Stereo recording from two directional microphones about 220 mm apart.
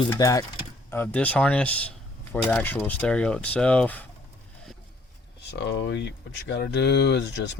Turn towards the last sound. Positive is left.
turn(degrees=50)  # may be behind; listen again after turning